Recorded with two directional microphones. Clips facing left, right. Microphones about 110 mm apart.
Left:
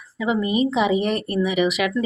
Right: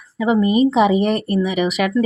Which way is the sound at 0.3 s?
45° right (ahead or behind).